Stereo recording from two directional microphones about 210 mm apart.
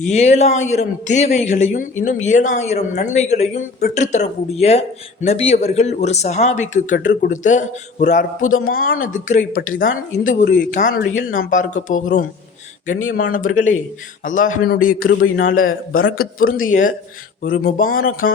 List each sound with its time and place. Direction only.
0.1 s speech: 30° left (ahead or behind)
8.4 s speech: 75° left (ahead or behind)
8.7 s speech: 40° left (ahead or behind)